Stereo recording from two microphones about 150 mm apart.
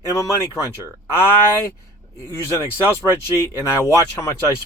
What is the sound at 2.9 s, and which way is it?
Speech, 15° left (ahead or behind).